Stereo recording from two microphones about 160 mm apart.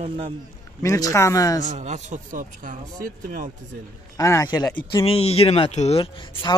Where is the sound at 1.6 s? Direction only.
45° right (ahead or behind).